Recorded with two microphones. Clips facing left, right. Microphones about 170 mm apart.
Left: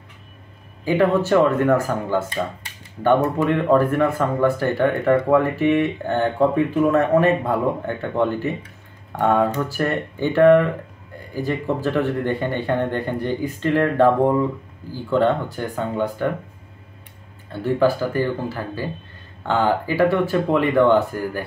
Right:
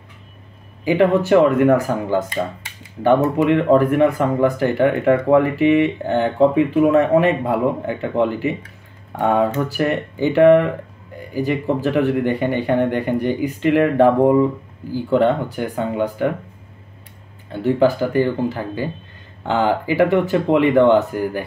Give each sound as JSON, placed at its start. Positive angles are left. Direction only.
{"t": 0.8, "sound": "speech", "side_deg": -15}
{"t": 17.5, "sound": "speech", "side_deg": -15}